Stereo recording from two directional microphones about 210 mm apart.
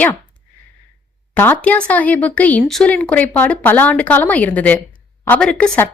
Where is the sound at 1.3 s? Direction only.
10° left (ahead or behind).